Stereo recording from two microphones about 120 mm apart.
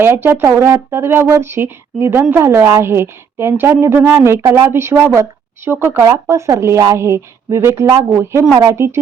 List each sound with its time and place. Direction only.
0.0 s a woman's voice: 15° right (ahead or behind)